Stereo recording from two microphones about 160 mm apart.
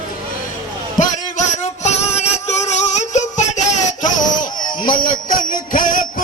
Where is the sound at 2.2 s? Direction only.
45° left (ahead or behind).